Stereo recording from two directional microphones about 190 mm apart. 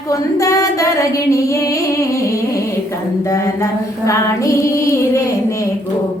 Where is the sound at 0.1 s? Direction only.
15° left (ahead or behind).